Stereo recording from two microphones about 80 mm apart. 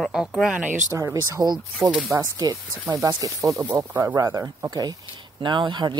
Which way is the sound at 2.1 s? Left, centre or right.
Right.